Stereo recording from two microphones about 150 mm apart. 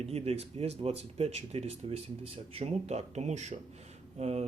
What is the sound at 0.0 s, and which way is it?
Speech, 45° right (ahead or behind).